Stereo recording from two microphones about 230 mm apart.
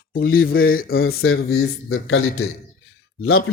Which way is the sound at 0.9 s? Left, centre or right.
Left.